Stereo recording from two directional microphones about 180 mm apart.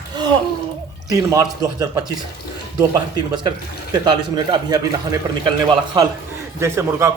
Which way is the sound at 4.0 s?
25° right (ahead or behind).